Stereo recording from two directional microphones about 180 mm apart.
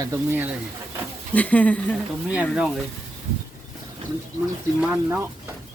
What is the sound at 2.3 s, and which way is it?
Speech, 5° right (ahead or behind).